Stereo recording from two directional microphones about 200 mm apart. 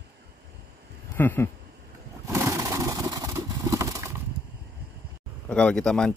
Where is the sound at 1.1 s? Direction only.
10° left (ahead or behind).